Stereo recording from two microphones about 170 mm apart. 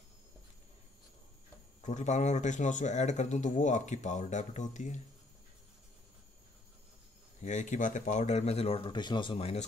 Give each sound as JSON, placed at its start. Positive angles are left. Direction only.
{"t": 1.8, "sound": "speech", "side_deg": 45}
{"t": 7.4, "sound": "speech", "side_deg": 45}